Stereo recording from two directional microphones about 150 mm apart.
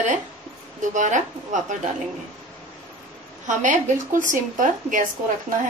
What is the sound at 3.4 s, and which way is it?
A woman's voice, 55° right (ahead or behind).